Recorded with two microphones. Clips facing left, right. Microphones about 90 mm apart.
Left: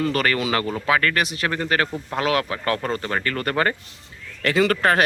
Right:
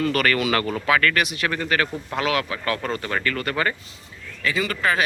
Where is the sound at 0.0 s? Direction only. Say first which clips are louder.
Even; 25° left (ahead or behind).